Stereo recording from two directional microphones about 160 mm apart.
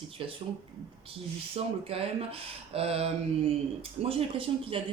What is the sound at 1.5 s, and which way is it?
Speech, 35° right (ahead or behind).